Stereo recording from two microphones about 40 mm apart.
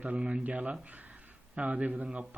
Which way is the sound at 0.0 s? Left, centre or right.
Right.